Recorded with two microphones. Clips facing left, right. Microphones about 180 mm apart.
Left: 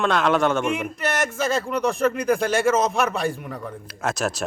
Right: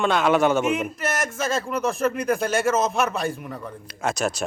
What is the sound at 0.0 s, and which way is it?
A man's voice, 5° right (ahead or behind).